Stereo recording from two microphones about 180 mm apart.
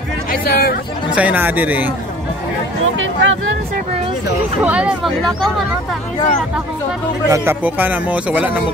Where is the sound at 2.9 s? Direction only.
90° right.